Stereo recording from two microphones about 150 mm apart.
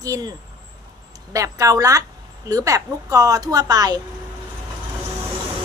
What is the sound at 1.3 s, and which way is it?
A woman's voice, 20° right (ahead or behind).